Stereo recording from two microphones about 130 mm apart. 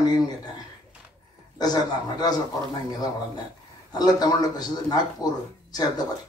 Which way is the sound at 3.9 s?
30° left (ahead or behind).